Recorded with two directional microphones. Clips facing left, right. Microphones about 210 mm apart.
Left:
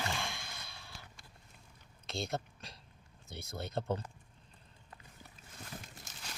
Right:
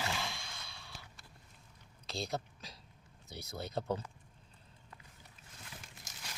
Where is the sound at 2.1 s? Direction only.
Centre (ahead or behind).